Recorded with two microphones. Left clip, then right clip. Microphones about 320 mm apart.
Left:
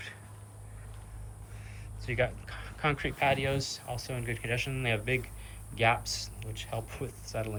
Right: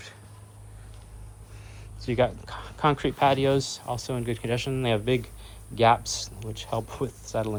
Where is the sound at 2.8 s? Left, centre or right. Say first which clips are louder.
Right 7 dB; right.